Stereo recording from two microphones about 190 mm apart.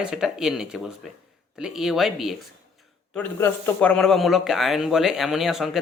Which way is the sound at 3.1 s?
10° left (ahead or behind).